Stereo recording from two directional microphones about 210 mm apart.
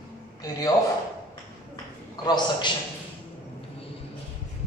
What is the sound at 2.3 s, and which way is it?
Speech, 20° left (ahead or behind).